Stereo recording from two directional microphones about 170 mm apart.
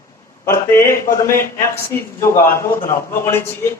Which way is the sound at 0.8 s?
50° left (ahead or behind).